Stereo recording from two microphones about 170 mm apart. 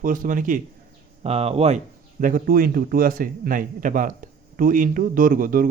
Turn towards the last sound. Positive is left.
turn(degrees=-55)  # may be behind; listen again after turning